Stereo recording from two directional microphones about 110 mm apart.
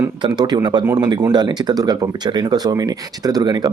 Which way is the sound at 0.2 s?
40° right (ahead or behind).